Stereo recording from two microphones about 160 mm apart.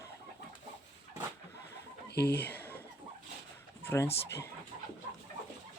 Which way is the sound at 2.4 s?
10° left (ahead or behind).